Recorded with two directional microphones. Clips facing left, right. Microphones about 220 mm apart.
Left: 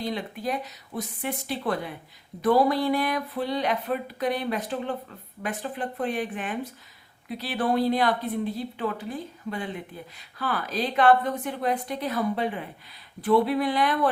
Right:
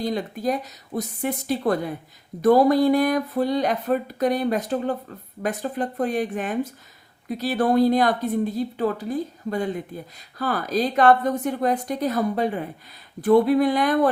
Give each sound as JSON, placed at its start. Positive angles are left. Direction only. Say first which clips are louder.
{"t": 0.0, "sound": "speech", "louder": "right 5 dB", "side_deg": -40}